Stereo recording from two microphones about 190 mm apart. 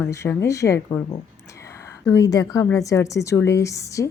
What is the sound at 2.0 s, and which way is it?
A woman's voice, 20° left (ahead or behind).